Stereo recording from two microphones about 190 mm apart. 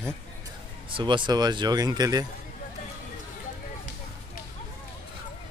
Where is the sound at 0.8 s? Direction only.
25° right (ahead or behind).